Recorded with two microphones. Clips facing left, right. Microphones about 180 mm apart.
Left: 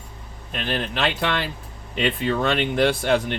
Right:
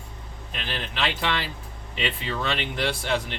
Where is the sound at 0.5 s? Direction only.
45° left (ahead or behind).